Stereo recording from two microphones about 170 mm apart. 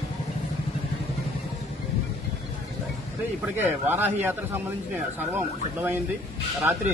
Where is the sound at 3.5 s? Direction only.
10° right (ahead or behind).